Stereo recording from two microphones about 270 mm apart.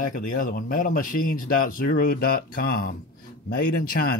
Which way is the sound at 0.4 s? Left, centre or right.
Left.